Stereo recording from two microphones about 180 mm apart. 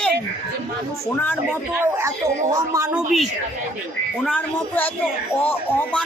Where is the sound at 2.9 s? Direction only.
Centre (ahead or behind).